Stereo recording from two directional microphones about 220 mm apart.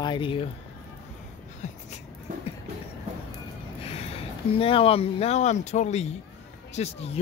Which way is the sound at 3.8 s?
25° left (ahead or behind).